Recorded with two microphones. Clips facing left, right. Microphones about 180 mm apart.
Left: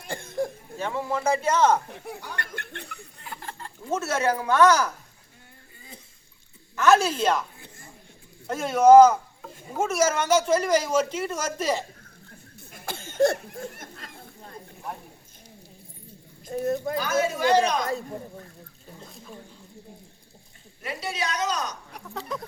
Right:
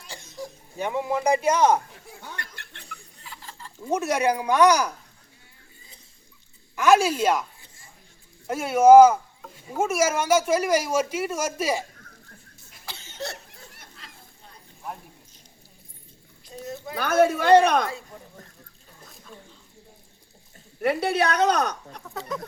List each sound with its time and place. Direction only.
0.0 s throat clearing: 55° left (ahead or behind)
0.8 s speech: 15° right (ahead or behind)
2.3 s chuckle: 55° left (ahead or behind)
3.8 s speech: 15° right (ahead or behind)
6.7 s speech: 10° right (ahead or behind)
8.4 s speech: 10° right (ahead or behind)
12.7 s a sound: 50° left (ahead or behind)
16.5 s speech: 55° left (ahead or behind)
16.9 s speech: 60° right (ahead or behind)
20.8 s speech: 60° right (ahead or behind)
22.1 s speech: centre (ahead or behind)